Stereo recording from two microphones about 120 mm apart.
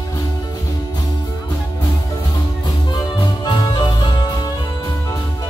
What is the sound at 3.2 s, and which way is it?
Music, 35° left (ahead or behind).